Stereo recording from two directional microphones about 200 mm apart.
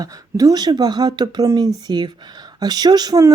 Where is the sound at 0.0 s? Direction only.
20° right (ahead or behind).